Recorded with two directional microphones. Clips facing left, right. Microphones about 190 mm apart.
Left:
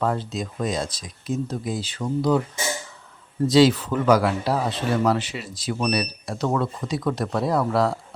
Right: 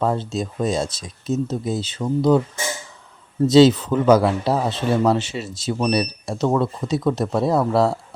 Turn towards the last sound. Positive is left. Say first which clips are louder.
# right 3 dB
turn(degrees=-25)  # may be behind; listen again after turning